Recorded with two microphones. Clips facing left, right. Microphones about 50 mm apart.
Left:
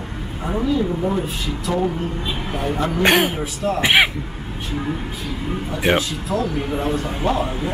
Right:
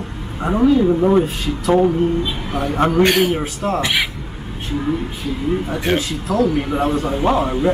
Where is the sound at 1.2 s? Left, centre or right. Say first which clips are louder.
Right 7 dB; right.